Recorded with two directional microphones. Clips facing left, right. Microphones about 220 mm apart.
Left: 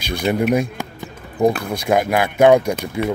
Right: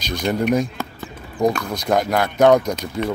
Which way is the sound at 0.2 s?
10° left (ahead or behind).